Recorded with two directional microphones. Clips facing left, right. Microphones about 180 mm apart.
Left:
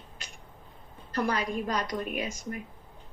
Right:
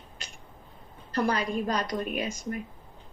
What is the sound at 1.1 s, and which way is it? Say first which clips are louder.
Speech: right 2 dB; 35° right (ahead or behind).